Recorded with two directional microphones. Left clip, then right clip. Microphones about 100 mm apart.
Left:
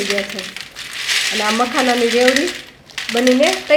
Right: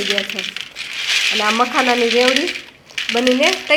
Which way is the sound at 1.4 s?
15° right (ahead or behind).